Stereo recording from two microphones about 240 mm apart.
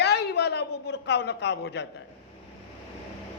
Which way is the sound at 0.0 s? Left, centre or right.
Left.